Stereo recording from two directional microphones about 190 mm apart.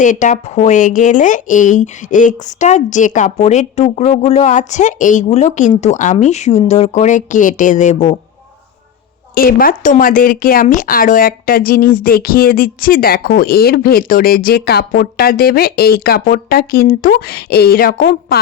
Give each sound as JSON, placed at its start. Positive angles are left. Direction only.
{"t": 0.0, "sound": "a woman's voice", "side_deg": 40}
{"t": 9.3, "sound": "speech", "side_deg": 50}